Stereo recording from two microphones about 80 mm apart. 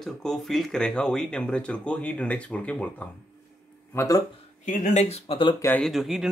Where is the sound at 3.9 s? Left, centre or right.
Left.